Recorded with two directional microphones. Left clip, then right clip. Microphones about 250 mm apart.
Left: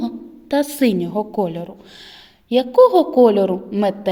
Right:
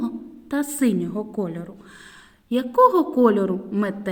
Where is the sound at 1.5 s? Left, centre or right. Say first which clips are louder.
Left 6 dB; left.